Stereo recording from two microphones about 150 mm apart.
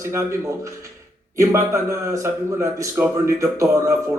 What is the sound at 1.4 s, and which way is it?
A man's voice, 20° right (ahead or behind).